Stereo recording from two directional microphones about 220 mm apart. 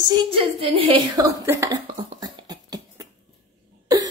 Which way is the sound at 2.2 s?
20° right (ahead or behind).